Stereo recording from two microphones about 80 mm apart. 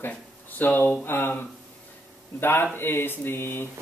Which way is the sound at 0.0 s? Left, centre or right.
Left.